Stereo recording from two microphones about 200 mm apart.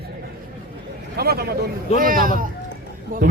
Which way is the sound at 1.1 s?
50° right (ahead or behind).